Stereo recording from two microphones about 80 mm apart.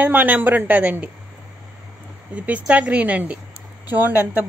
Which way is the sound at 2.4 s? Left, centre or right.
Centre.